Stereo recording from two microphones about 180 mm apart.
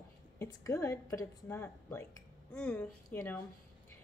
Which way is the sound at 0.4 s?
15° left (ahead or behind).